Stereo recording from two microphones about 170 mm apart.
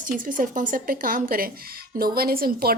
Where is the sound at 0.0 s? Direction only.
55° right (ahead or behind).